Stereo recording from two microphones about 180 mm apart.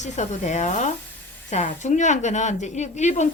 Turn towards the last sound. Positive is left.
turn(degrees=40)  # may be behind; listen again after turning